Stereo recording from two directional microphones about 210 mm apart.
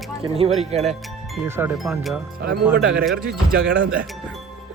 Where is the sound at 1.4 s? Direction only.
10° right (ahead or behind).